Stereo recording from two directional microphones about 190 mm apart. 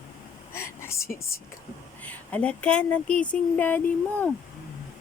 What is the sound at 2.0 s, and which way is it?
Speech, 10° left (ahead or behind).